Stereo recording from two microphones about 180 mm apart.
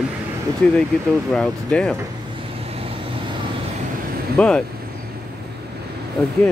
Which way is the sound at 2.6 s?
35° right (ahead or behind).